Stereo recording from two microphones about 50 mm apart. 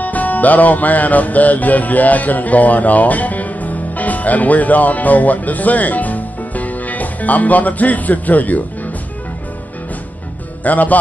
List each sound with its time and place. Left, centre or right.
0.0 s music: left
10.6 s speech: left